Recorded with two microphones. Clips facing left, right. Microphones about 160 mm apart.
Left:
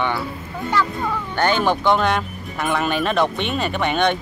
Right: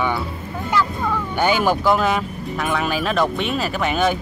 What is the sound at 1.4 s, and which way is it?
Speech, 10° right (ahead or behind).